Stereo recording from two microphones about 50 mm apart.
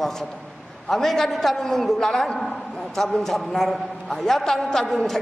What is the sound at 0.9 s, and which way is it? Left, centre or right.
A woman's voice, centre.